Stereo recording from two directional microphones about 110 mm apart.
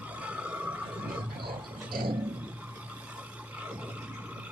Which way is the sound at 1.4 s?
45° right (ahead or behind).